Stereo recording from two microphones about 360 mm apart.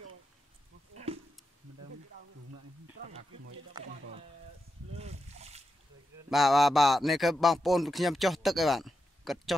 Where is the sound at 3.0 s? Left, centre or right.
Right.